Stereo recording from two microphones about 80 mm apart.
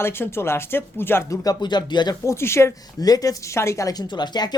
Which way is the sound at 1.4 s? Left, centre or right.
Left.